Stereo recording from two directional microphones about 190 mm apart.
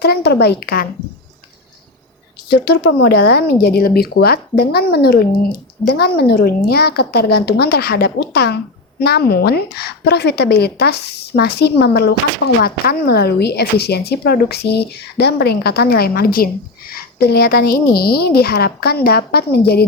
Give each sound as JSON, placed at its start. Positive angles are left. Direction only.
{"t": 0.0, "sound": "speech", "side_deg": 60}
{"t": 2.5, "sound": "speech", "side_deg": 60}